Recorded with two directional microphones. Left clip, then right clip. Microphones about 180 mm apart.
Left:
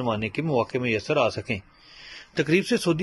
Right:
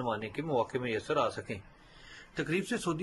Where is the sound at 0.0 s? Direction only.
10° left (ahead or behind).